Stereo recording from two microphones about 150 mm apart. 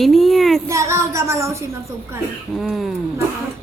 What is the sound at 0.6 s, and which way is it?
Child singing, 20° right (ahead or behind).